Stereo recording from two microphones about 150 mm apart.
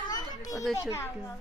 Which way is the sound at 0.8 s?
20° left (ahead or behind).